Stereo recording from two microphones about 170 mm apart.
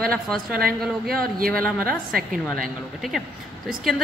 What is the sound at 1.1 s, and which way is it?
Speech, 60° right (ahead or behind).